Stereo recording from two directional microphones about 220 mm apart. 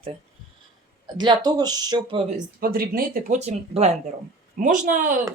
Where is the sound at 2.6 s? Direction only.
40° right (ahead or behind).